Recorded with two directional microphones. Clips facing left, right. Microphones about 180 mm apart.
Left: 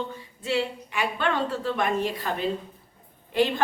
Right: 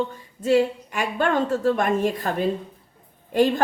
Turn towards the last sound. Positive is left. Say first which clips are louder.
# right 4 dB
turn(degrees=-45)  # may be behind; listen again after turning